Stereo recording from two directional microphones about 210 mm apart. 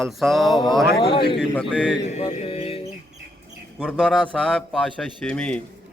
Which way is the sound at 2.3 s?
30° left (ahead or behind).